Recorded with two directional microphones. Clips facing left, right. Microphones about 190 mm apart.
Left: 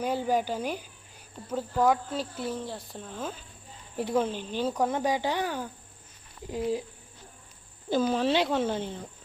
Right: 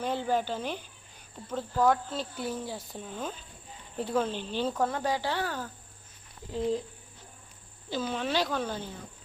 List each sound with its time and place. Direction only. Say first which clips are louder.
0.0 s speech: left 2 dB; 10° left (ahead or behind)
2.4 s speech: left 1 dB; centre (ahead or behind)
3.9 s speech: left 2 dB; 10° left (ahead or behind)
7.9 s speech: left 7 dB; 45° left (ahead or behind)
8.3 s speech: left 4 dB; 25° left (ahead or behind)